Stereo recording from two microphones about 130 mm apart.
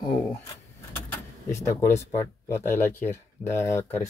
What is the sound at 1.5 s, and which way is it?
Speech, 20° left (ahead or behind).